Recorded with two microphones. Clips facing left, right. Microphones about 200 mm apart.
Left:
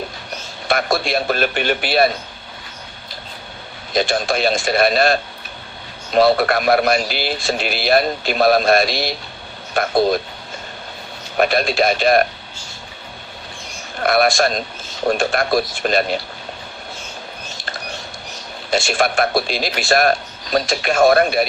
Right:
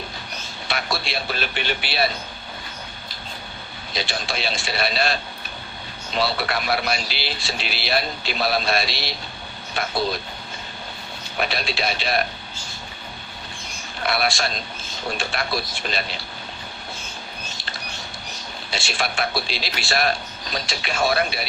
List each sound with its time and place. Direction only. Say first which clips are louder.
0.7 s a man's voice: left 9 dB; 50° left (ahead or behind)
3.9 s a man's voice: left 10 dB; 50° left (ahead or behind)
11.3 s a man's voice: left 9 dB; 50° left (ahead or behind)
14.0 s a man's voice: left 8 dB; 50° left (ahead or behind)
18.7 s a man's voice: left 10 dB; 50° left (ahead or behind)